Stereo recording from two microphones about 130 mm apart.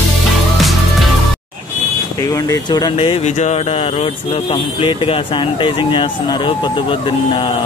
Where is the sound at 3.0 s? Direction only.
45° left (ahead or behind).